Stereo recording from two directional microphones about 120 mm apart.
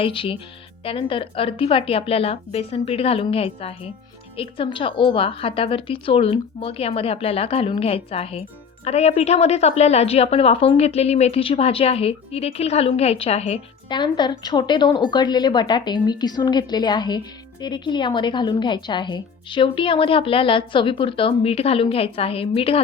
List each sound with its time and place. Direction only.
0.0 s a woman's voice: 50° left (ahead or behind)
13.8 s a woman's voice: 40° left (ahead or behind)